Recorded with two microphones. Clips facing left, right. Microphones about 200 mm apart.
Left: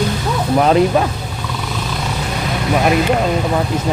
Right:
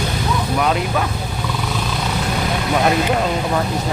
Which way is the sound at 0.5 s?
35° left (ahead or behind).